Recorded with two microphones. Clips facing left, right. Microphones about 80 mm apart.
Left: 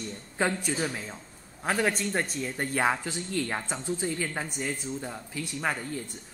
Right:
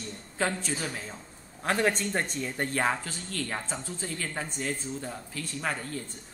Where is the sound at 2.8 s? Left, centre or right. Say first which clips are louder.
Left 5 dB; centre.